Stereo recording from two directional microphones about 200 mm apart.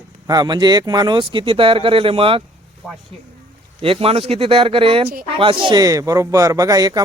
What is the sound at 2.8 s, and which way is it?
Speech, 5° left (ahead or behind).